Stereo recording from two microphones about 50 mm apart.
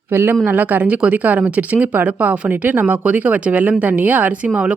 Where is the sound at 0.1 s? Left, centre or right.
Right.